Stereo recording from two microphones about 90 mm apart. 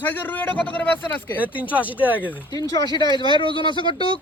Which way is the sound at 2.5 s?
45° left (ahead or behind).